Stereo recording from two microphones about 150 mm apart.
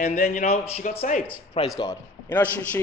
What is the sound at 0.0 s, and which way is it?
Speech, 60° left (ahead or behind).